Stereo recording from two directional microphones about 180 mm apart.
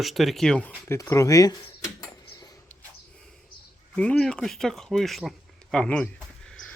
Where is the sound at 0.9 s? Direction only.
15° left (ahead or behind).